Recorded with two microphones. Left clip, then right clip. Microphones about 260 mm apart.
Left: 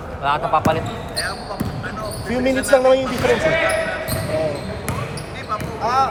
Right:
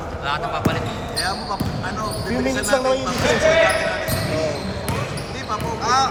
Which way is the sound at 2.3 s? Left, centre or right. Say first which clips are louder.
Left 5 dB; left.